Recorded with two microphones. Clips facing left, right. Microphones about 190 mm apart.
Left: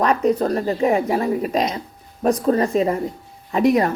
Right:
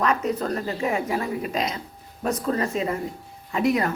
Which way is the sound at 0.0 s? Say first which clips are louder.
Left 6 dB; 35° left (ahead or behind).